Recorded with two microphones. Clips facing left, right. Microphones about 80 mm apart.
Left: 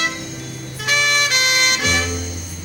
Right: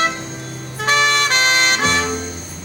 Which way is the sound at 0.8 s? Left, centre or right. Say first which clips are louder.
Right 3 dB; right.